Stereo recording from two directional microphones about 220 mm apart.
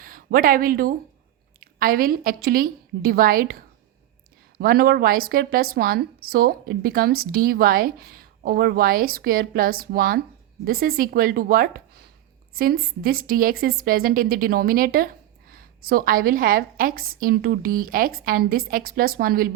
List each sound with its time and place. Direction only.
0.0 s a woman's voice: 40° right (ahead or behind)